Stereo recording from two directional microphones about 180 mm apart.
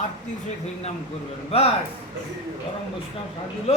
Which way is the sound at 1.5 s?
35° left (ahead or behind).